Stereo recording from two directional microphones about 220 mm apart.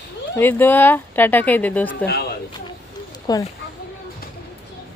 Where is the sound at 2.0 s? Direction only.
45° left (ahead or behind).